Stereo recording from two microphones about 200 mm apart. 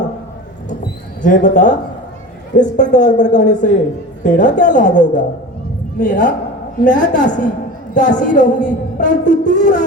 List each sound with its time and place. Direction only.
1.2 s a woman's voice: 40° left (ahead or behind)